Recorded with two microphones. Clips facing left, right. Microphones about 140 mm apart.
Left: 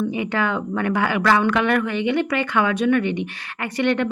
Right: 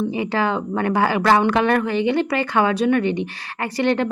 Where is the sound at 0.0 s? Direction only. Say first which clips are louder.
Right 1 dB; 30° right (ahead or behind).